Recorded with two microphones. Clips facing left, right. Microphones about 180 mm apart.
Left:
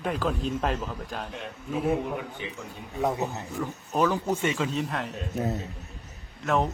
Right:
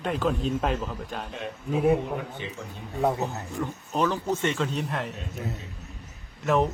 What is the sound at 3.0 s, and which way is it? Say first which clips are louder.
A man's voice: right 2 dB; centre (ahead or behind).